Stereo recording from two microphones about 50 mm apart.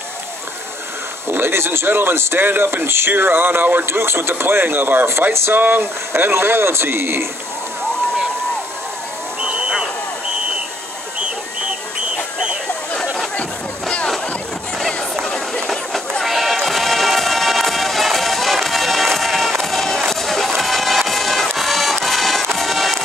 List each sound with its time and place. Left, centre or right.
1.3 s speech: right
3.8 s speech: right
5.5 s speech: right
9.4 s vehicle: centre
13.0 s a sound: centre
13.4 s a sound: left
15.2 s music: centre